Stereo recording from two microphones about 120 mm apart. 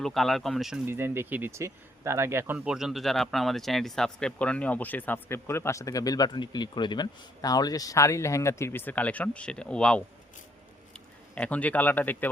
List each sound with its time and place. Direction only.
0.0 s speech: centre (ahead or behind)
0.9 s speech: 20° right (ahead or behind)
2.6 s speech: 5° right (ahead or behind); by 12.3 s 15° left (ahead or behind)